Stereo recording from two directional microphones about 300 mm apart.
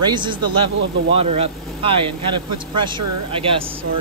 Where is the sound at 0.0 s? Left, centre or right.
Centre.